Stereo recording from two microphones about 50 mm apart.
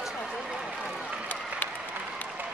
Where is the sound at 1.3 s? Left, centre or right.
Left.